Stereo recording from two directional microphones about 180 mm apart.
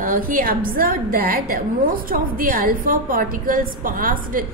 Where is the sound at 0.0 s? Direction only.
50° right (ahead or behind).